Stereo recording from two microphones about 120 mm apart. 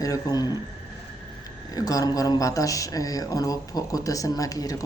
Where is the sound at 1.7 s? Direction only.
30° left (ahead or behind).